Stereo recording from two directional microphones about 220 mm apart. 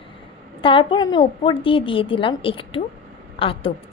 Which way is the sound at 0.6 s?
20° left (ahead or behind).